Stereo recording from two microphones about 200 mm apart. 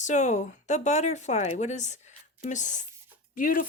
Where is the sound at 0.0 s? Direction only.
35° left (ahead or behind).